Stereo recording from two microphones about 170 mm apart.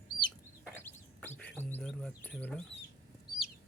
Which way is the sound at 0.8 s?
10° left (ahead or behind).